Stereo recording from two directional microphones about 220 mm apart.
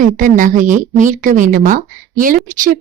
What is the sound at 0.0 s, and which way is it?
A woman's voice, 35° right (ahead or behind).